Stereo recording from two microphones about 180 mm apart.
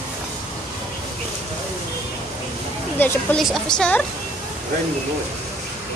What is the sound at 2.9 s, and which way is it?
A woman's voice, 5° left (ahead or behind).